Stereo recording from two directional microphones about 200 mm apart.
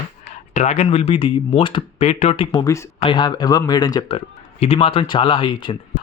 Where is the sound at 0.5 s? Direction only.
35° left (ahead or behind).